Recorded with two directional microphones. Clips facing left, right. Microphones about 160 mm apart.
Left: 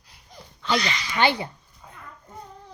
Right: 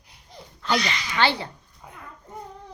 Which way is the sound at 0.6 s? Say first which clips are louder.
Even; centre (ahead or behind).